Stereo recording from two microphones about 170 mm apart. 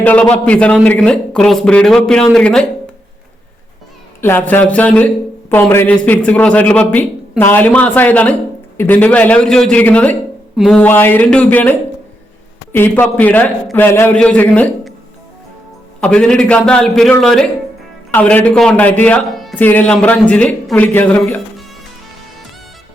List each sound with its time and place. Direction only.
0.0 s speech: 10° left (ahead or behind)
4.2 s a man's voice: 10° left (ahead or behind)
16.0 s a man's voice: 5° left (ahead or behind)